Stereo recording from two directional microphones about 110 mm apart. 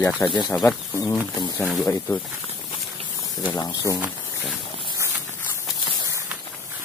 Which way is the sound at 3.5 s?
35° left (ahead or behind).